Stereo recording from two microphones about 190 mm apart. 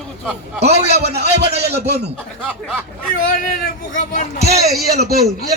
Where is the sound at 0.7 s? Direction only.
35° right (ahead or behind).